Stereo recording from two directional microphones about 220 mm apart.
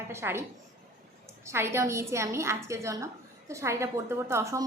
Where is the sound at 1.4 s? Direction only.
10° right (ahead or behind).